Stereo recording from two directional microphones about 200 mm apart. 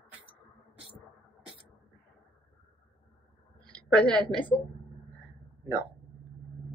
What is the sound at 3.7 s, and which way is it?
Speech, 5° left (ahead or behind).